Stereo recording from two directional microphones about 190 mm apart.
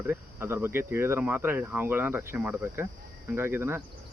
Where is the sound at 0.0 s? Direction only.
10° right (ahead or behind).